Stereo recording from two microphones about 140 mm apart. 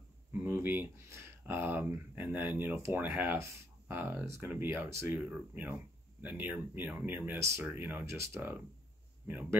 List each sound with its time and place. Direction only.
0.3 s speech: 15° right (ahead or behind)